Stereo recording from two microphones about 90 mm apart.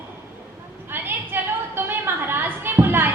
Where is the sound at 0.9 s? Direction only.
25° right (ahead or behind).